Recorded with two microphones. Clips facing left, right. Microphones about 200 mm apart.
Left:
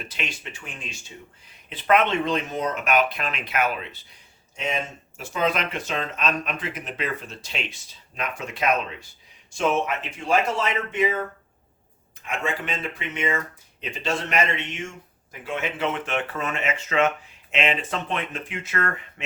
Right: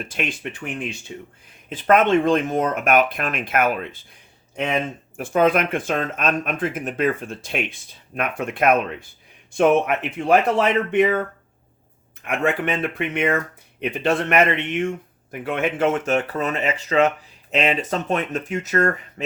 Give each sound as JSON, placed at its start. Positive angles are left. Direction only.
{"t": 0.0, "sound": "speech", "side_deg": -50}
{"t": 1.7, "sound": "speech", "side_deg": -45}
{"t": 12.2, "sound": "speech", "side_deg": -60}